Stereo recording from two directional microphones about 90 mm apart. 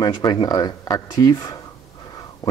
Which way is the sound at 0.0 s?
50° left (ahead or behind).